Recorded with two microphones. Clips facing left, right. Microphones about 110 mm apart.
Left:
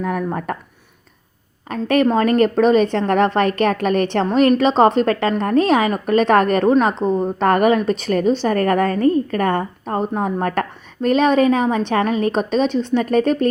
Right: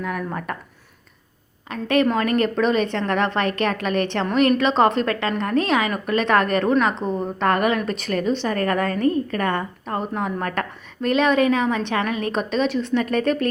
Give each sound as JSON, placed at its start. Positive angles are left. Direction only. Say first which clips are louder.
{"t": 0.0, "sound": "a woman's voice", "louder": "left 5 dB", "side_deg": 40}
{"t": 1.7, "sound": "a woman's voice", "louder": "left 3 dB", "side_deg": 40}